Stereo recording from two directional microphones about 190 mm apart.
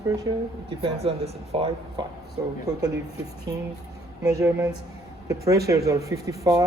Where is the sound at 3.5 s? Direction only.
20° right (ahead or behind).